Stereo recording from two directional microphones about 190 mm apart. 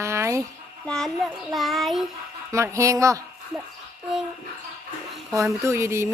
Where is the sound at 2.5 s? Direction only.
15° right (ahead or behind).